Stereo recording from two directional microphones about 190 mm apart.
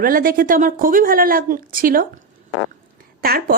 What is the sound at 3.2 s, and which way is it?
Speech, 50° right (ahead or behind).